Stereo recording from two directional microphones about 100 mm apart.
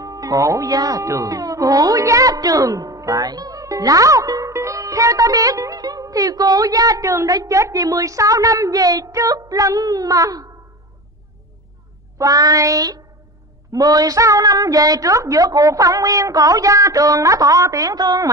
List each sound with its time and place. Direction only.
0.0 s speech: 35° right (ahead or behind)
12.2 s speech: 40° right (ahead or behind)